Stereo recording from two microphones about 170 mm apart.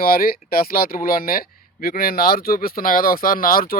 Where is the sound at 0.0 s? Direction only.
60° left (ahead or behind).